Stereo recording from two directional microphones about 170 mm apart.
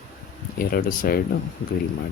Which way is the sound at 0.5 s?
55° left (ahead or behind).